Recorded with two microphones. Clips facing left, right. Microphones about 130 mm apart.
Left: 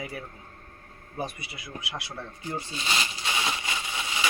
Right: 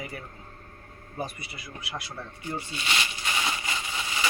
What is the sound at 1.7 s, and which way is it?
Speech, 40° left (ahead or behind).